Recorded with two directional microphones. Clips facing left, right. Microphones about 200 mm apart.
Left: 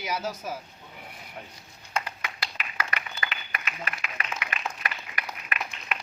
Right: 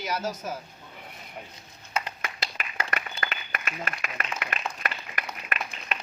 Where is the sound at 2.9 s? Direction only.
45° right (ahead or behind).